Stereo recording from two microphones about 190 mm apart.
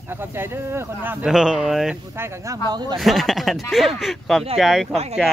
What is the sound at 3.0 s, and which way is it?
Speech, centre (ahead or behind).